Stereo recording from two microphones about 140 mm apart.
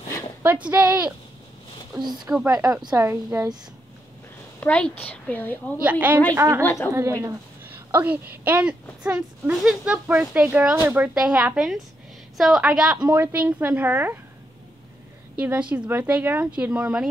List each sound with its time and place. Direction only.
0.4 s speech: 10° right (ahead or behind)
2.0 s speech: 30° right (ahead or behind)
2.4 s speech: 15° right (ahead or behind)
4.6 s a woman's voice: 10° left (ahead or behind)
5.8 s speech: 10° right (ahead or behind)
6.6 s a woman's voice: 20° left (ahead or behind)
6.9 s a woman's voice: 20° right (ahead or behind)
13.0 s speech: 20° right (ahead or behind)
15.3 s speech: 10° right (ahead or behind)